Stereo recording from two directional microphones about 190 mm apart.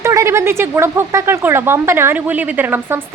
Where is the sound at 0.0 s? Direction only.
15° right (ahead or behind).